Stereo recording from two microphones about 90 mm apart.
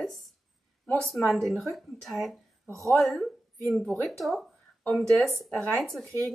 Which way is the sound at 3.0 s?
Centre (ahead or behind).